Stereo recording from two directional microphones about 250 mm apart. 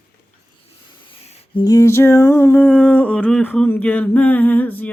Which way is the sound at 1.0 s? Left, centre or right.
Left.